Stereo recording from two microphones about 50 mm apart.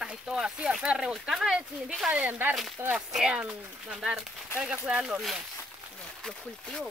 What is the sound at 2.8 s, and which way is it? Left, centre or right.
Speech, right.